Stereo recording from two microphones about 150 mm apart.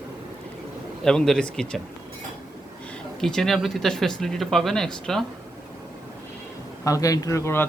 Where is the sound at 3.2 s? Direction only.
Centre (ahead or behind).